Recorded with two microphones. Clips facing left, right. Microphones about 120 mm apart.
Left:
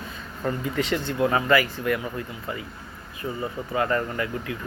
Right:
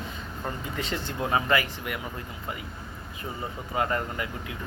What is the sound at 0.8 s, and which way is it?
Speech, 25° right (ahead or behind).